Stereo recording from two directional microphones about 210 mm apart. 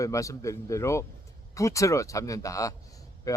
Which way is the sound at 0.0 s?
15° left (ahead or behind).